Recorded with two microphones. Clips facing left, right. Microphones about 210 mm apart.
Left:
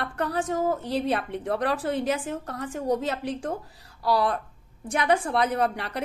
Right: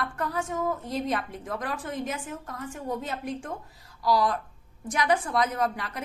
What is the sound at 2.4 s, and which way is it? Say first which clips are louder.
A woman's voice: left 6 dB; 90° left.